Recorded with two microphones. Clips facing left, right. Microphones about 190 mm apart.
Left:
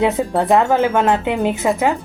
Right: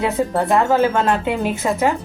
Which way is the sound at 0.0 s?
20° left (ahead or behind).